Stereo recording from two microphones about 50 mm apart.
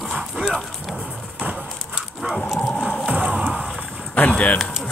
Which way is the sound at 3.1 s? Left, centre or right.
Right.